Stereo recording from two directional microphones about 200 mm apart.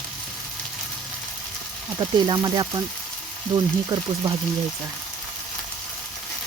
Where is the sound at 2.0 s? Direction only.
20° right (ahead or behind).